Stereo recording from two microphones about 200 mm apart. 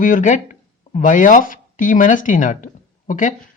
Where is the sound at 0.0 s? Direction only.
40° left (ahead or behind).